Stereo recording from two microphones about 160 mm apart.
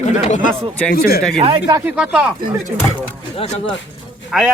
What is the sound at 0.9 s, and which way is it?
Speech, 70° left (ahead or behind).